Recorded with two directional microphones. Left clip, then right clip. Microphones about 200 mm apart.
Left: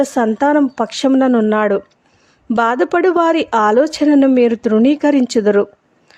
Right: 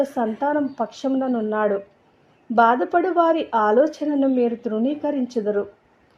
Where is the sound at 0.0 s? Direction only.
35° left (ahead or behind).